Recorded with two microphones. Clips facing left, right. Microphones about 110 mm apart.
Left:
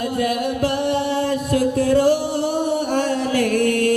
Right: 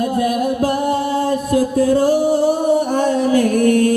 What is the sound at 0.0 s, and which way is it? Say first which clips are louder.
Music: right 4 dB; 30° right (ahead or behind).